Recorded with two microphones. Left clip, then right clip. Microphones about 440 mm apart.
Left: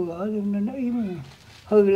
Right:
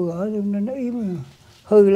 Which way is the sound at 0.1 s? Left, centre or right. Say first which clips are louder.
Right 3 dB; right.